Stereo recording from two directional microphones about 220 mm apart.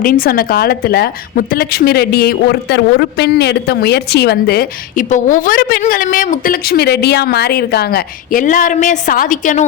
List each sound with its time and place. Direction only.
0.0 s a woman's voice: 40° left (ahead or behind)